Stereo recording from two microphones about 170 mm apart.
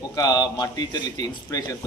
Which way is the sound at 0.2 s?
20° left (ahead or behind).